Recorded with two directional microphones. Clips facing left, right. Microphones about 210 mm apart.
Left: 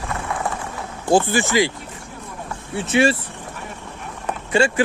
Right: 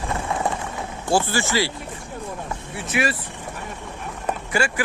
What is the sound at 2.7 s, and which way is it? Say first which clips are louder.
Speech: left 7 dB; 25° left (ahead or behind).